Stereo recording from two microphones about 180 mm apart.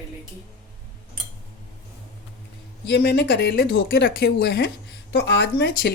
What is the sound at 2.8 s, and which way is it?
Speech, 70° left (ahead or behind).